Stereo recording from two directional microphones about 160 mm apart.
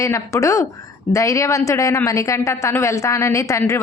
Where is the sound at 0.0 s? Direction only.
20° left (ahead or behind).